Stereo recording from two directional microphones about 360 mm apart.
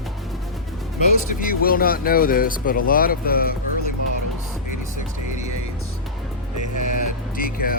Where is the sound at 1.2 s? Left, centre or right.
Left.